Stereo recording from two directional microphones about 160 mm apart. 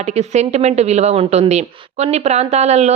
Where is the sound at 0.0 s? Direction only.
45° right (ahead or behind).